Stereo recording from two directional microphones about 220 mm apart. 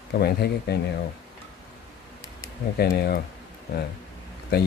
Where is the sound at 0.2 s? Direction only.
45° left (ahead or behind).